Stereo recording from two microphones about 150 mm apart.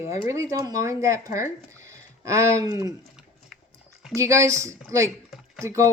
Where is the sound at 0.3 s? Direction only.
20° right (ahead or behind).